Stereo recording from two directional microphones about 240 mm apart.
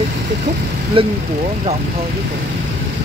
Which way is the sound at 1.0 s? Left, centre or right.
Right.